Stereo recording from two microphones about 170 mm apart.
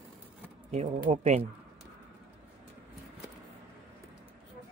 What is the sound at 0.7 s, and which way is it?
Speech, 40° right (ahead or behind).